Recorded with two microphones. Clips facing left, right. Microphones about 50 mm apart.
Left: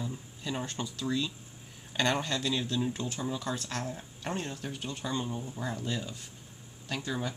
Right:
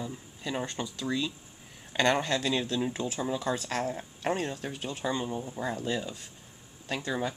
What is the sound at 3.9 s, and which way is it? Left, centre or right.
Speech, right.